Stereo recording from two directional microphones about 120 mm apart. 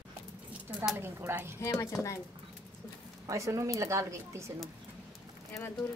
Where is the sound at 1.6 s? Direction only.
25° left (ahead or behind).